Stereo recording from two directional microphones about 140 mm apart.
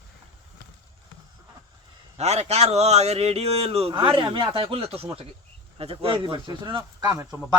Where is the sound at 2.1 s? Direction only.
50° right (ahead or behind).